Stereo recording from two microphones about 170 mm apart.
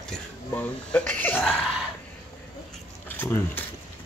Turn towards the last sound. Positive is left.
turn(degrees=10)  # may be behind; listen again after turning